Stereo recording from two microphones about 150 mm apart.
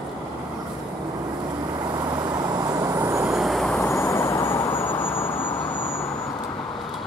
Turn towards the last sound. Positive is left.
turn(degrees=15)  # may be behind; listen again after turning